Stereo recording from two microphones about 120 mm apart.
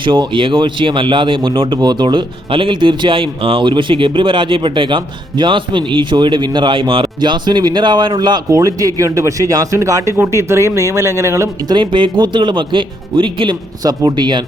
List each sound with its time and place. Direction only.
0.0 s speech: 45° right (ahead or behind); by 11.4 s 25° right (ahead or behind)
11.7 s speech: 40° right (ahead or behind)